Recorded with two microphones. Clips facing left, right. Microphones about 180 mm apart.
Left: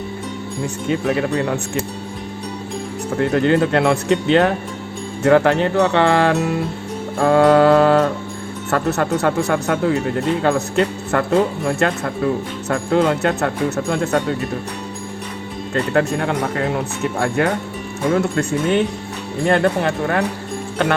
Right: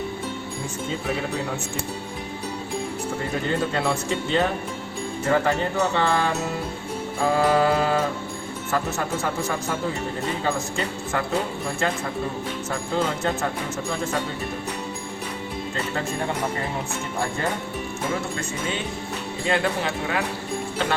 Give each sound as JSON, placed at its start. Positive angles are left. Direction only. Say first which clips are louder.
{"t": 0.9, "sound": "speech", "louder": "left 9 dB", "side_deg": 70}
{"t": 3.2, "sound": "speech", "louder": "left 11 dB", "side_deg": 70}
{"t": 15.7, "sound": "speech", "louder": "left 12 dB", "side_deg": 65}